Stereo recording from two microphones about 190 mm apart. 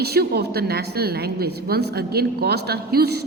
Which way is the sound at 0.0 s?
55° right (ahead or behind).